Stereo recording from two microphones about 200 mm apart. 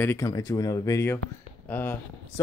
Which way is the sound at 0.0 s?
15° left (ahead or behind).